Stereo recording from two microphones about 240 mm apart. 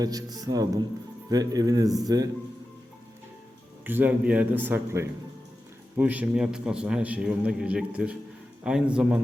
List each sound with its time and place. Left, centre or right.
0.0 s speech: centre
3.8 s a man's voice: centre